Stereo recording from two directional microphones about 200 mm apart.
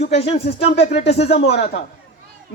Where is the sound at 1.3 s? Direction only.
60° left (ahead or behind).